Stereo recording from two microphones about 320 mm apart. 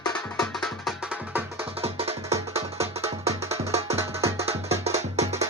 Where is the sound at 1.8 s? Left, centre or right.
Centre.